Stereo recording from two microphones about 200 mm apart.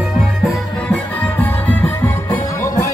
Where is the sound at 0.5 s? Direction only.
5° left (ahead or behind).